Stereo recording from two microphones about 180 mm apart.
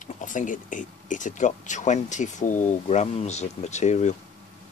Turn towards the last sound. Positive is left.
turn(degrees=40)  # may be behind; listen again after turning